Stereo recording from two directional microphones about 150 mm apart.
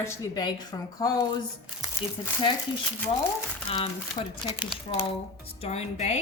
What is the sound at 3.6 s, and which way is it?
A woman's voice, 40° left (ahead or behind).